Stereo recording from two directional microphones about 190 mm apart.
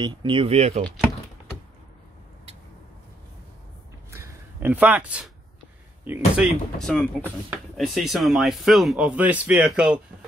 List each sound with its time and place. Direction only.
0.0 s speech: 25° right (ahead or behind)
4.1 s a sound: 10° right (ahead or behind)
6.0 s speech: 10° right (ahead or behind)
6.9 s speech: 5° left (ahead or behind)